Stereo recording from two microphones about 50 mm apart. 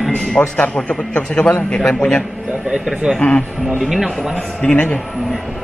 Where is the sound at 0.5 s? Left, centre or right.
Left.